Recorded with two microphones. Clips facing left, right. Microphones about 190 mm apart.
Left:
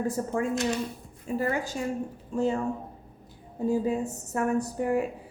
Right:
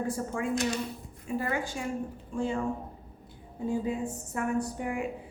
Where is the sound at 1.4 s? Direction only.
40° left (ahead or behind).